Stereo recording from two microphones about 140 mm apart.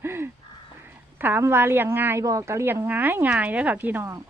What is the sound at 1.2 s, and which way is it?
Speech, 15° right (ahead or behind).